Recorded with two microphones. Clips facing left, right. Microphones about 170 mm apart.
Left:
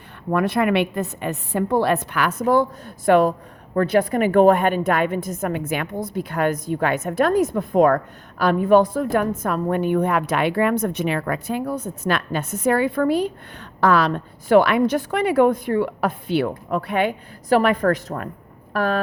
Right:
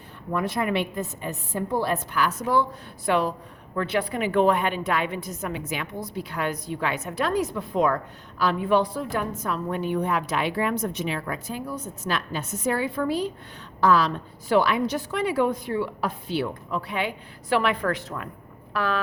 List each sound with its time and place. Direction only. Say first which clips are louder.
0.3 s a woman's voice: left 6 dB; 60° left (ahead or behind); by 18.9 s 45° left (ahead or behind)